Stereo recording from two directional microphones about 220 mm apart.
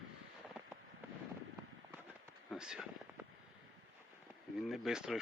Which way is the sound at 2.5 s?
5° right (ahead or behind).